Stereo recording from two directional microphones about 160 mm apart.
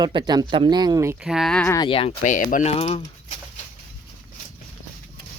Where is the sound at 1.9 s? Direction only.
35° left (ahead or behind).